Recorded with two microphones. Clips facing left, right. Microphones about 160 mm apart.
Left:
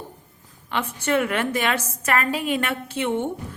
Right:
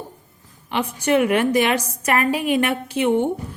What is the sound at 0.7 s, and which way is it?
A woman's voice, 15° right (ahead or behind).